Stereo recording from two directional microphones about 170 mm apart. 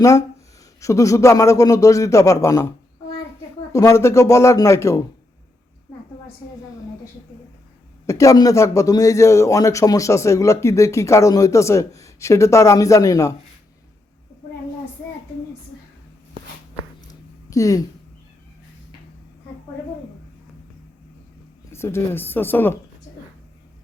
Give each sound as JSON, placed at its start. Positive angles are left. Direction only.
{"t": 0.8, "sound": "a man's voice", "side_deg": 20}
{"t": 8.0, "sound": "a man's voice", "side_deg": 20}
{"t": 17.5, "sound": "speech", "side_deg": 20}
{"t": 21.7, "sound": "a man's voice", "side_deg": 15}